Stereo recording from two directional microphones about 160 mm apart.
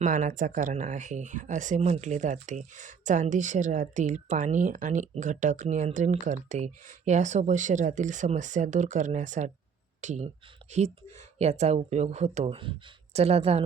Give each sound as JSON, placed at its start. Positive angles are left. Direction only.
{"t": 0.0, "sound": "a woman's voice", "side_deg": -50}